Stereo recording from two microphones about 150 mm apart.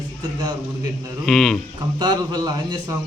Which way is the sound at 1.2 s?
Centre (ahead or behind).